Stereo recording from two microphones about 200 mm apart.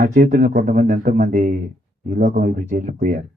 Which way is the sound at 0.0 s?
40° right (ahead or behind).